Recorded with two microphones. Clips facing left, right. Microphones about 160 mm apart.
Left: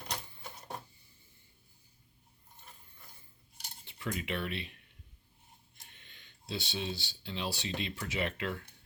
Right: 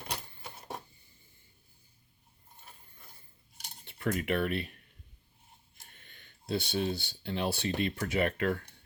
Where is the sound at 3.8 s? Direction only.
55° right (ahead or behind).